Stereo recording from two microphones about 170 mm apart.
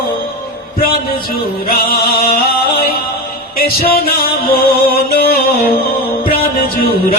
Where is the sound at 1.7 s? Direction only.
60° left (ahead or behind).